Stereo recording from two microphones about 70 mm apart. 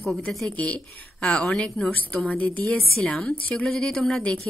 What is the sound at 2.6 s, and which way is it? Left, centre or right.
A woman's voice, centre.